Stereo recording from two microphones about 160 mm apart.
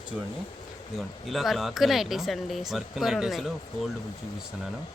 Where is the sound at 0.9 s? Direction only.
Centre (ahead or behind).